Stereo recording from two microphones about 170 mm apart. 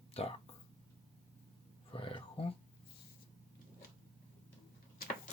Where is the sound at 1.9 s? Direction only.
30° left (ahead or behind).